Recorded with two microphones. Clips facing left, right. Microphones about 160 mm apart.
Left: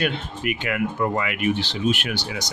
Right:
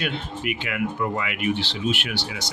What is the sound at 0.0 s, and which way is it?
Speech, 50° left (ahead or behind).